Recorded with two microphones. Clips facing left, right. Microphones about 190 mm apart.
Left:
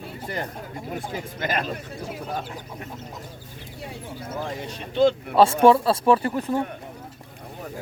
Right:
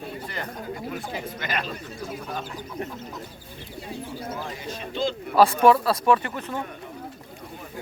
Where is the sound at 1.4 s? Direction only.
45° left (ahead or behind).